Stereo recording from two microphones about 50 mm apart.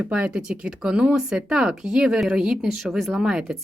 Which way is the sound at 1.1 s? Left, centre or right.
Centre.